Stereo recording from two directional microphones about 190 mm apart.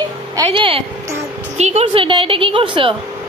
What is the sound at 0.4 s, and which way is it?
A woman's voice, 30° right (ahead or behind).